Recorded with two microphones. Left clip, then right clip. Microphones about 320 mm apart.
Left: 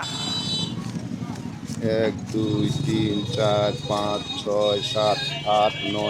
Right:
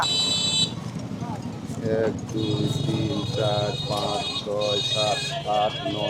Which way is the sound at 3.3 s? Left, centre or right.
Left.